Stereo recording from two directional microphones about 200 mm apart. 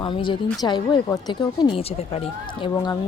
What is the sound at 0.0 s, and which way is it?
Speech, 25° left (ahead or behind).